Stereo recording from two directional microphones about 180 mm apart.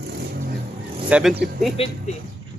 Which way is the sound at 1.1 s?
5° right (ahead or behind).